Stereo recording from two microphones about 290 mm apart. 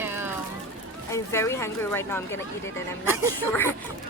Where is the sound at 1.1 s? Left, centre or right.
Centre.